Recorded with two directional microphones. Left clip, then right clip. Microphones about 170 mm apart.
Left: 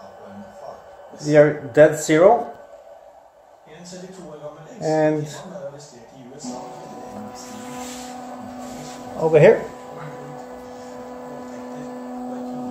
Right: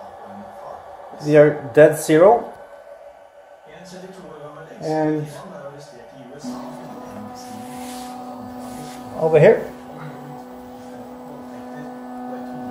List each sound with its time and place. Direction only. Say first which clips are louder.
1.2 s a man's voice: right 2 dB; 10° right (ahead or behind)
4.8 s speech: left 2 dB; 25° left (ahead or behind)
9.2 s speech: even; 5° left (ahead or behind)